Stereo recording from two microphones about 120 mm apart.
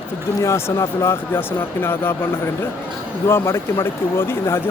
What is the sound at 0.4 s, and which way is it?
Speech, 25° left (ahead or behind).